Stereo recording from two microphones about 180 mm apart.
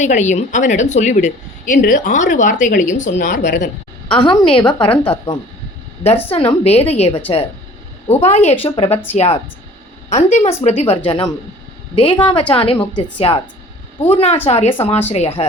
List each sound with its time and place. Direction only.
0.0 s a woman's voice: 40° left (ahead or behind)
4.1 s a woman's voice: 25° left (ahead or behind)